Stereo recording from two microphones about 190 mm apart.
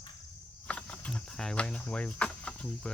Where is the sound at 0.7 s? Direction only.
5° left (ahead or behind).